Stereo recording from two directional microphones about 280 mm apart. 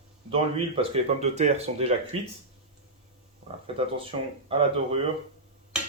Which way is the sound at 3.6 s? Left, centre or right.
Centre.